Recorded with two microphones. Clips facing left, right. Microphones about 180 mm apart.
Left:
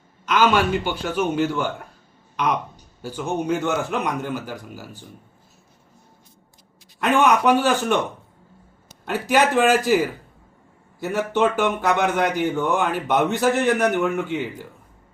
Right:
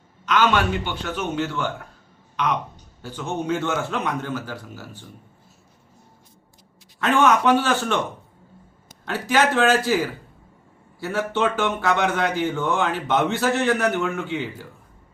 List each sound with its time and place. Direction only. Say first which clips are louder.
0.3 s speech: left 2 dB; 10° left (ahead or behind)
7.0 s speech: left 1 dB; 15° left (ahead or behind)
9.0 s speech: left 1 dB; 15° left (ahead or behind)